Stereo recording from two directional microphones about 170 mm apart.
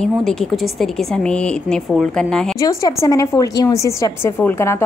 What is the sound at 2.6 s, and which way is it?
A woman's voice, 20° left (ahead or behind).